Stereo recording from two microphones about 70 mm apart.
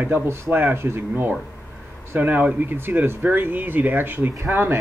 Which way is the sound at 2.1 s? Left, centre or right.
Right.